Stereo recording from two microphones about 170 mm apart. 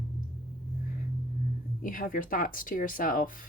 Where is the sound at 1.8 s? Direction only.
55° left (ahead or behind).